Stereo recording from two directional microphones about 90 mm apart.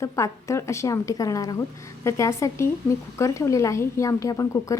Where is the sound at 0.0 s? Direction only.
35° left (ahead or behind).